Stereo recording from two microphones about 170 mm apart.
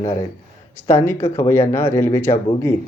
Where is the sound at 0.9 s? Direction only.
15° left (ahead or behind).